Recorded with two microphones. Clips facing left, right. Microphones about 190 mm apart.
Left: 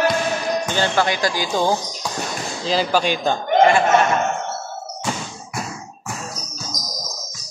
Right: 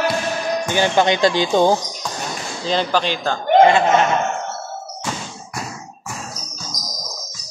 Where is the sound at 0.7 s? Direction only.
15° right (ahead or behind).